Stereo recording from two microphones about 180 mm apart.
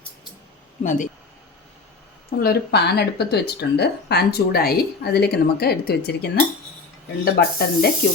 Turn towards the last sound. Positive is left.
turn(degrees=60)  # may be behind; listen again after turning